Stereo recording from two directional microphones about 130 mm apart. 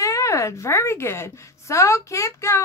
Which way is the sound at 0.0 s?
25° left (ahead or behind).